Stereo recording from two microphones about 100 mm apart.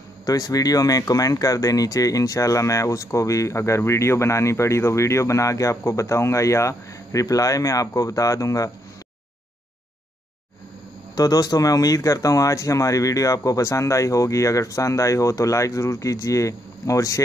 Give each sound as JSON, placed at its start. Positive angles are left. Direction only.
{"t": 0.2, "sound": "speech", "side_deg": 40}
{"t": 11.1, "sound": "speech", "side_deg": 40}